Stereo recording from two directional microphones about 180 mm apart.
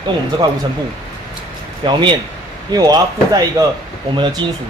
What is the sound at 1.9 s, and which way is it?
Speech, 25° right (ahead or behind).